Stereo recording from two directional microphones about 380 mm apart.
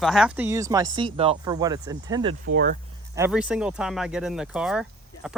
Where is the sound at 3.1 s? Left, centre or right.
Centre.